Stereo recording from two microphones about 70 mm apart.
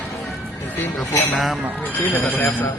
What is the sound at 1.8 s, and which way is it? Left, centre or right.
Speech, left.